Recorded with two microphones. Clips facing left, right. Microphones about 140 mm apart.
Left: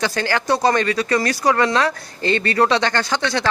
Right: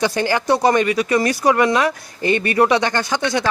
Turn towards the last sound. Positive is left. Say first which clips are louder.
# right 1 dB
turn(degrees=-15)  # may be behind; listen again after turning